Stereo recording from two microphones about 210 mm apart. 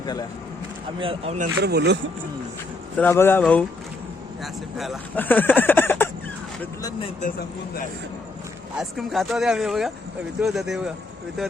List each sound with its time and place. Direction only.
0.0 s speech: 20° left (ahead or behind)
0.9 s speech: 25° right (ahead or behind)
1.6 s speech: 55° right (ahead or behind)
3.0 s speech: 10° left (ahead or behind)
4.8 s speech: 5° left (ahead or behind)
7.2 s speech: 40° left (ahead or behind)
8.7 s speech: centre (ahead or behind)